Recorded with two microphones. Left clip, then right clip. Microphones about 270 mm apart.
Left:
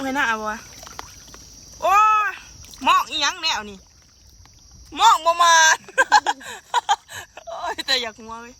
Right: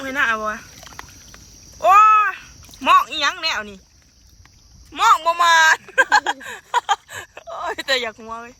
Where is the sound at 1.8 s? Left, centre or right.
Centre.